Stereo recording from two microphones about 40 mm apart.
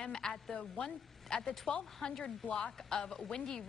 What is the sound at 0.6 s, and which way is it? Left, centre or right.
A woman's voice, left.